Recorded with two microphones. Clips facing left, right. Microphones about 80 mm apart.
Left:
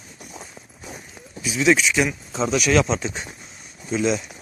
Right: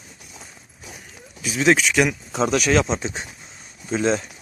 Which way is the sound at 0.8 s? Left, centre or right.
Left.